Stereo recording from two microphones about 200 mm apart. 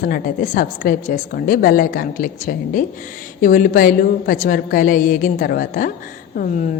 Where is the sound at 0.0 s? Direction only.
45° left (ahead or behind).